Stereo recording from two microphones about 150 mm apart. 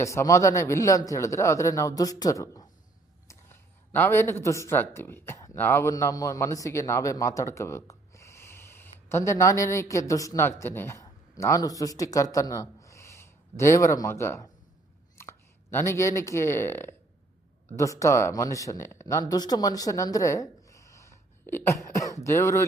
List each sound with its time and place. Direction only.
0.0 s speech: 20° left (ahead or behind)